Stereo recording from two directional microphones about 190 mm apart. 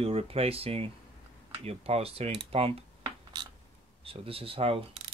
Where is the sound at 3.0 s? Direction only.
20° right (ahead or behind).